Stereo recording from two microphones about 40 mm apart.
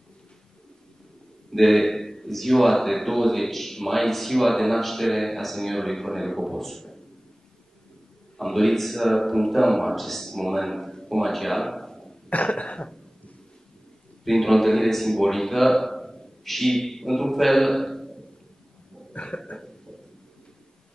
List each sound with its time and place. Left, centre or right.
1.5 s speech: centre
8.4 s speech: centre
12.4 s cough: left
14.2 s a man's voice: centre
19.1 s a sound: left